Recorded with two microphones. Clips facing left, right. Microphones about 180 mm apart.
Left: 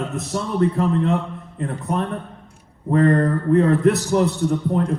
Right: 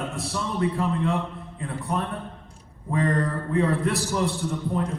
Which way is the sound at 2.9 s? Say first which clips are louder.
Left 8 dB; 50° left (ahead or behind).